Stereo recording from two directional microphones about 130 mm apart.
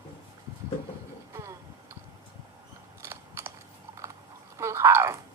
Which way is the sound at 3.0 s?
20° right (ahead or behind).